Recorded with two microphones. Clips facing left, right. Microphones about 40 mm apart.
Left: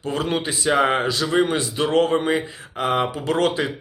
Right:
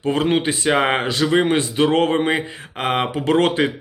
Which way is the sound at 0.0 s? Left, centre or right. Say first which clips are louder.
Right 5 dB; right.